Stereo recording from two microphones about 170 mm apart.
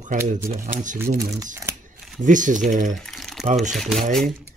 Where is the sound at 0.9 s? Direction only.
15° right (ahead or behind).